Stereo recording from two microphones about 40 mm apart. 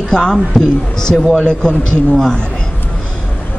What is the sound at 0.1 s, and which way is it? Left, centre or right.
Speech, centre.